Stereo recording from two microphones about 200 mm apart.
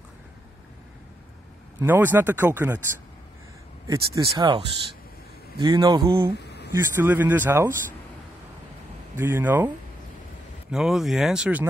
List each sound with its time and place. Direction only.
1.9 s speech: 10° right (ahead or behind)
3.8 s speech: 15° right (ahead or behind)
6.3 s a sound: 55° left (ahead or behind)
6.7 s speech: 10° right (ahead or behind)
9.2 s speech: 10° right (ahead or behind)
10.7 s speech: centre (ahead or behind)